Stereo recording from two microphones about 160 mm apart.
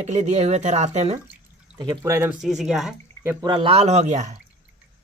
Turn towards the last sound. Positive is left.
turn(degrees=-50)  # may be behind; listen again after turning